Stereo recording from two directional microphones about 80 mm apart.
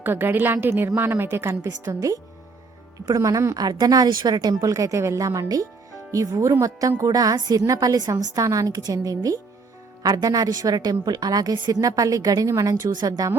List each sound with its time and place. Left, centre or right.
0.0 s a woman's voice: right
1.6 s a woman's voice: right
4.6 s a woman's voice: right